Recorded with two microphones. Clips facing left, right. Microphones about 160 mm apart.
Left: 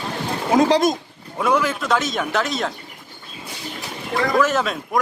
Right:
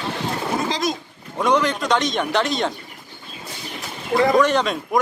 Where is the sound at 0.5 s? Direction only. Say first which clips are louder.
Left 11 dB; 65° left (ahead or behind).